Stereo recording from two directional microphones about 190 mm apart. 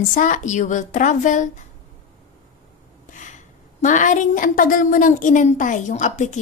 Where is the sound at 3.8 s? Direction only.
40° left (ahead or behind).